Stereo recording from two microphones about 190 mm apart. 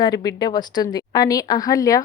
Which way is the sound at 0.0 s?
20° left (ahead or behind).